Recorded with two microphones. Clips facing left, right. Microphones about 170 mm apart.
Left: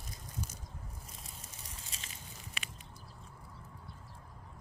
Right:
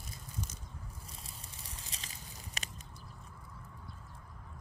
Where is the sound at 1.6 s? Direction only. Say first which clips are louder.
Right 1 dB; 35° right (ahead or behind).